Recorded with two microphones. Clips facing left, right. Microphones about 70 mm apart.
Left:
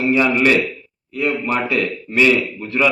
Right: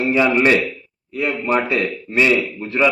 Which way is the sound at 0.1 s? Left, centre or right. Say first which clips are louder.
Even; right.